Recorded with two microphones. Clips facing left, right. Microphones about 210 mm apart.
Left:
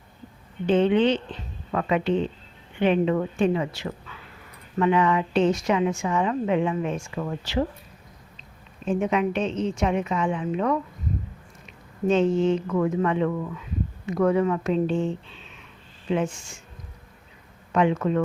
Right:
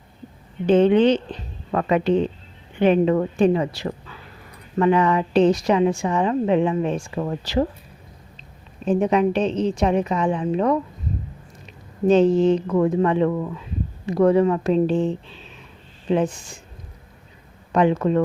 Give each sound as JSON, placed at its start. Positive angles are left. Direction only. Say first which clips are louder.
{"t": 0.7, "sound": "a woman's voice", "louder": "right 5 dB", "side_deg": -40}
{"t": 8.8, "sound": "a woman's voice", "louder": "right 5 dB", "side_deg": -35}
{"t": 12.0, "sound": "a woman's voice", "louder": "right 5 dB", "side_deg": -35}
{"t": 17.7, "sound": "speech", "louder": "right 4 dB", "side_deg": -35}